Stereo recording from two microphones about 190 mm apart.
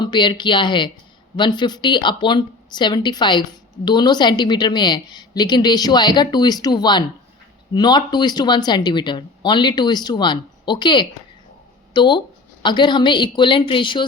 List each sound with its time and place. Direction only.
0.0 s speech: 25° left (ahead or behind)